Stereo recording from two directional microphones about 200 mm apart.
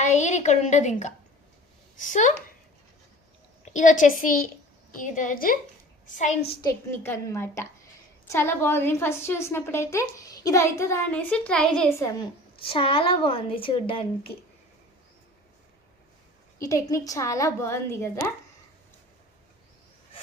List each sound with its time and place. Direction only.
0.0 s a woman's voice: 35° left (ahead or behind)
3.7 s a woman's voice: 40° left (ahead or behind)
6.1 s a woman's voice: 35° left (ahead or behind)
6.6 s a woman's voice: 15° left (ahead or behind)
12.6 s a woman's voice: 25° left (ahead or behind)
16.6 s a woman's voice: 15° left (ahead or behind)